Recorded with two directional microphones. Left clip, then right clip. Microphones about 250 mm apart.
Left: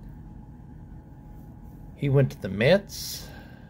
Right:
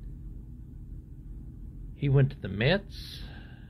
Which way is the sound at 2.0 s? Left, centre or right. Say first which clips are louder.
Left 5 dB; centre.